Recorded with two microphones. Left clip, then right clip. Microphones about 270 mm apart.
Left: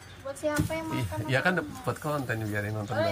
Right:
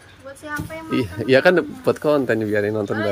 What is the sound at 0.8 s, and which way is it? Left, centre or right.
Speech, right.